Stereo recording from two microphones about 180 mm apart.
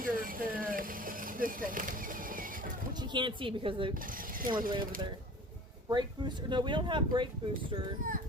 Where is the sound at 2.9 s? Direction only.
25° right (ahead or behind).